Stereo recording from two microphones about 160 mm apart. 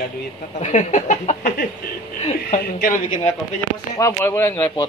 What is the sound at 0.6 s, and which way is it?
Speech, 50° left (ahead or behind).